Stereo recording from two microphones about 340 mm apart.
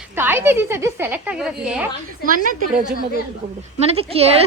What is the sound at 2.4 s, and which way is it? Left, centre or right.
A woman's voice, right.